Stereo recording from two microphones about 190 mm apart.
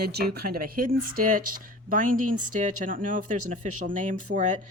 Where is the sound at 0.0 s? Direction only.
55° right (ahead or behind).